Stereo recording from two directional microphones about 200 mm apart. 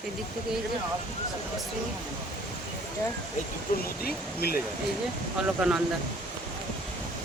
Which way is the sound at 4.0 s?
50° left (ahead or behind).